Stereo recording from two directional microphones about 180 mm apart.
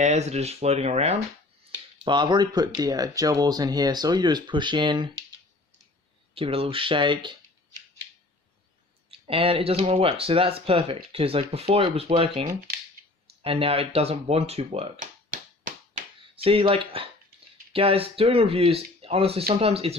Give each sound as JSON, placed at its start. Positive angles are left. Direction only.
{"t": 0.0, "sound": "speech", "side_deg": -40}
{"t": 2.0, "sound": "speech", "side_deg": -25}
{"t": 6.3, "sound": "speech", "side_deg": -30}
{"t": 9.0, "sound": "speech", "side_deg": -30}
{"t": 14.9, "sound": "finger snapping", "side_deg": -45}
{"t": 16.3, "sound": "speech", "side_deg": -30}